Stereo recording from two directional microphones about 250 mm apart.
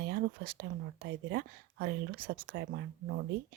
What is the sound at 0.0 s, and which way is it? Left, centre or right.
Speech, right.